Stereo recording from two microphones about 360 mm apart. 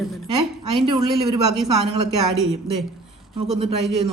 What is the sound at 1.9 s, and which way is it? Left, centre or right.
Speech, right.